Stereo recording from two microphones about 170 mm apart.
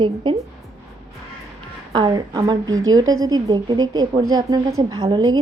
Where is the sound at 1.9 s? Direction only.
25° right (ahead or behind).